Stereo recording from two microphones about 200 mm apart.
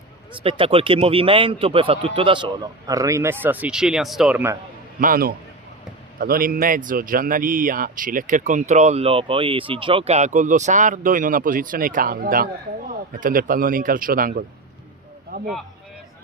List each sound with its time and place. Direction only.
0.3 s a man's voice: 25° right (ahead or behind); by 4.5 s 5° right (ahead or behind)
4.9 s a man's voice: 45° right (ahead or behind)